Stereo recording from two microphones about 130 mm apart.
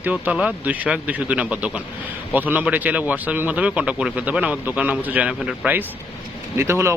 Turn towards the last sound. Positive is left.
turn(degrees=-20)  # may be behind; listen again after turning